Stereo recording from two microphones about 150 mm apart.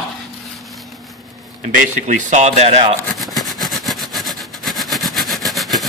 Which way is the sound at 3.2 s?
Centre (ahead or behind).